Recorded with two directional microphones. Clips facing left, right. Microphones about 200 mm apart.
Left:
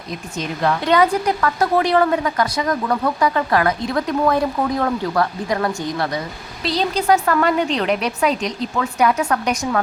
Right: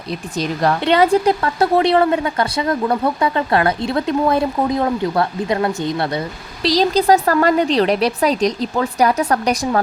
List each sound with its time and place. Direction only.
0.3 s a woman's voice: 35° right (ahead or behind)
6.7 s speech: 40° right (ahead or behind)